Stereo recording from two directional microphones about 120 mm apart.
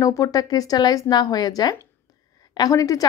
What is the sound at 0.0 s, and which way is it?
A woman's voice, 25° left (ahead or behind).